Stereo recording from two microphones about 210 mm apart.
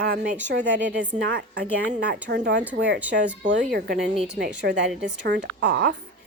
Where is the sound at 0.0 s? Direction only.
50° right (ahead or behind).